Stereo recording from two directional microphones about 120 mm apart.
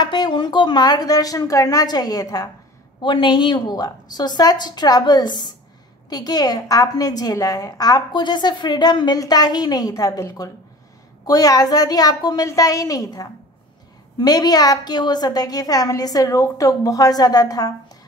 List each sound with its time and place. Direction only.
0.0 s a woman's voice: 35° left (ahead or behind)